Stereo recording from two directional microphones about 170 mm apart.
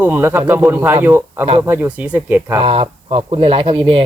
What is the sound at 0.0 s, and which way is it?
A man's voice, 10° right (ahead or behind).